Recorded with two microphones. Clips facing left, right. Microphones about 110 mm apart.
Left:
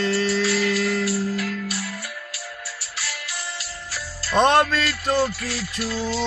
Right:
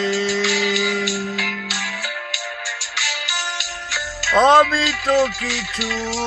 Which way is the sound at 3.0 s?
90° right.